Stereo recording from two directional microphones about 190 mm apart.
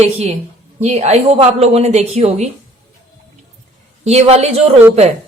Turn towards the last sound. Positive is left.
turn(degrees=-35)  # may be behind; listen again after turning